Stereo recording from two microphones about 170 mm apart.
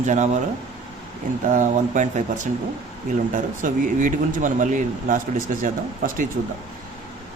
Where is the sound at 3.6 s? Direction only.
50° right (ahead or behind).